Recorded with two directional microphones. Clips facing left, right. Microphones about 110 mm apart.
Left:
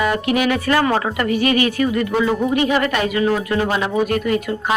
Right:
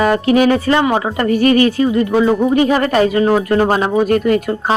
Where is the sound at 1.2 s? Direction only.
40° right (ahead or behind).